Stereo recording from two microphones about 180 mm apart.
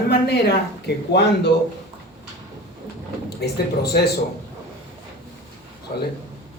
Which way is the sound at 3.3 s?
65° left (ahead or behind).